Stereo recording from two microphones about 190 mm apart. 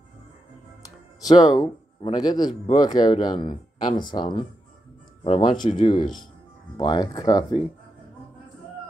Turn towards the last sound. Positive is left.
turn(degrees=20)  # may be behind; listen again after turning